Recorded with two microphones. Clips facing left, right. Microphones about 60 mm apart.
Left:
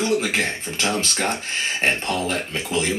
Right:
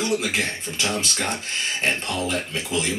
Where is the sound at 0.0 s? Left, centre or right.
Left.